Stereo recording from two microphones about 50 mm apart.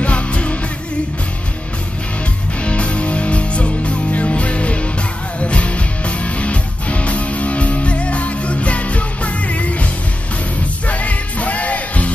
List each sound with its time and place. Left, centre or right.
0.0 s music: left
2.6 s music: left
10.9 s music: left